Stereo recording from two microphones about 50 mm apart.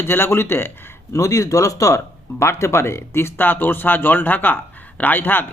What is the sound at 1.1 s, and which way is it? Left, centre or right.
Speech, left.